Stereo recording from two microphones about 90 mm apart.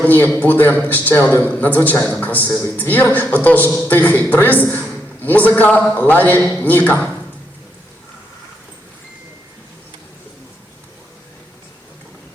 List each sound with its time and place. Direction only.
0.0 s speech: 20° left (ahead or behind)